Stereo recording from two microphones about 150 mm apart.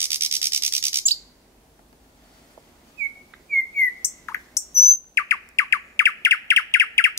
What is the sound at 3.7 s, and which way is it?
Bird, 15° left (ahead or behind).